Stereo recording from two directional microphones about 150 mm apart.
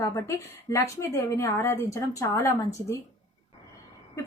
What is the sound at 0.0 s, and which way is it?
A woman's voice, 20° left (ahead or behind).